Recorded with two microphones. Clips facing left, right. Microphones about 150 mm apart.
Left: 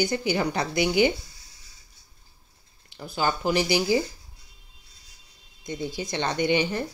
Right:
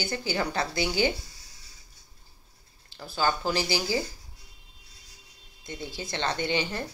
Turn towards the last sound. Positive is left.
turn(degrees=15)  # may be behind; listen again after turning